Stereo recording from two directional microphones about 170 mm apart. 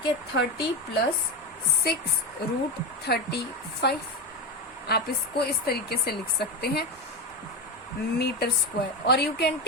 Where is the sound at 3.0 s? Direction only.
70° left (ahead or behind).